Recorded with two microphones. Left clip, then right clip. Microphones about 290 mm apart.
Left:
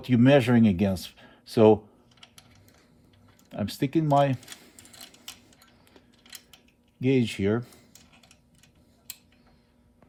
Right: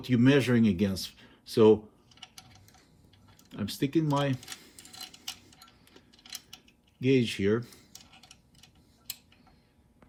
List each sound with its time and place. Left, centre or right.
0.0 s speech: left
3.5 s speech: left
7.0 s speech: left